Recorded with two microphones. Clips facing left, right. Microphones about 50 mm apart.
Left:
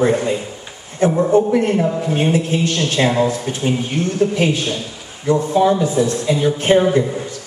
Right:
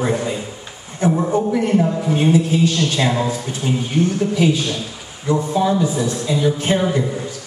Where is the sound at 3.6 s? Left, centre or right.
Left.